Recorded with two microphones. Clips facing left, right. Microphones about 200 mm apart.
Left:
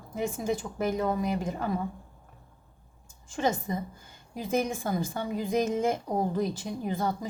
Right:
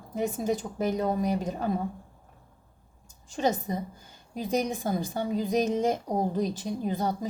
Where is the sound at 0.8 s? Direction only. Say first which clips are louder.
Even; 20° right (ahead or behind).